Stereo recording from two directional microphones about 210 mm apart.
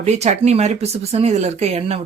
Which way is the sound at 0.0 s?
30° right (ahead or behind).